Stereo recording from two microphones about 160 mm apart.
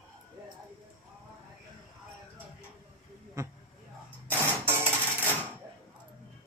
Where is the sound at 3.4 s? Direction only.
20° right (ahead or behind).